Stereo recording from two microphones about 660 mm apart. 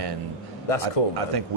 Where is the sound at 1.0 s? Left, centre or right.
Left.